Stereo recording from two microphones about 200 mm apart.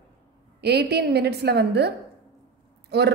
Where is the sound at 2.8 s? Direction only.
55° right (ahead or behind).